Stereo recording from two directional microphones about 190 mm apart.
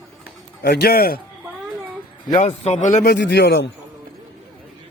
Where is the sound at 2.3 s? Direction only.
35° left (ahead or behind); by 3.7 s 65° left (ahead or behind).